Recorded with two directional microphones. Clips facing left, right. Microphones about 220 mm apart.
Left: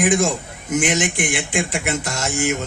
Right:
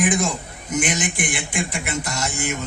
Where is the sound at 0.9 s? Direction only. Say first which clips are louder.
Left 4 dB; 65° left (ahead or behind).